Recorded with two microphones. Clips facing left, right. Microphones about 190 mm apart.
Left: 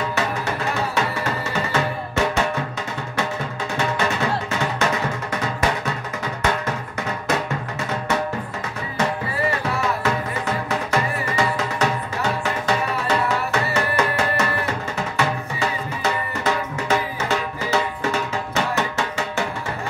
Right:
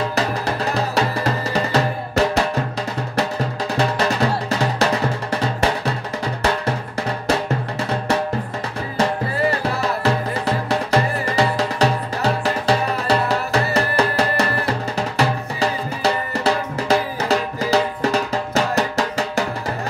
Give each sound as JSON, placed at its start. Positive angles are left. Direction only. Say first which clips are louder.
{"t": 0.1, "sound": "music", "louder": "right 2 dB", "side_deg": -35}
{"t": 3.7, "sound": "music", "louder": "right 3 dB", "side_deg": -35}
{"t": 8.9, "sound": "music", "louder": "right 3 dB", "side_deg": -35}